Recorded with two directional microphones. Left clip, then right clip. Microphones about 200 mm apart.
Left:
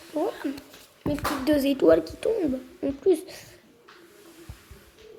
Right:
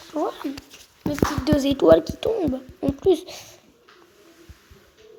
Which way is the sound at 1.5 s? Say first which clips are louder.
Right 4 dB; 25° right (ahead or behind).